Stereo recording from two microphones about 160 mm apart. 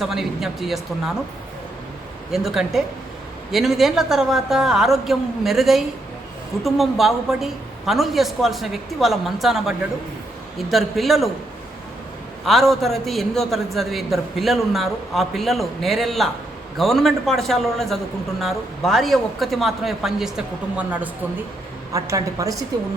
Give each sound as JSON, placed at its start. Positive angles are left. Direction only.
{"t": 0.0, "sound": "a man's voice", "side_deg": 0}
{"t": 2.3, "sound": "a man's voice", "side_deg": 0}
{"t": 12.5, "sound": "a man's voice", "side_deg": 0}
{"t": 21.9, "sound": "a woman's voice", "side_deg": -20}